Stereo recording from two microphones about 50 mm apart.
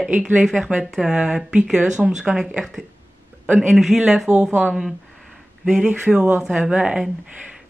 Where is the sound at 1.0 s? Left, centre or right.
Centre.